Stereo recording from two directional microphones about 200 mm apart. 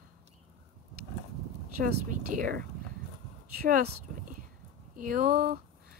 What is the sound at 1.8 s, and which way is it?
Speech, 40° right (ahead or behind).